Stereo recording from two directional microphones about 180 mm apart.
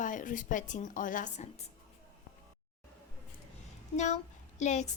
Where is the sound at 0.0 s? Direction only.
45° left (ahead or behind).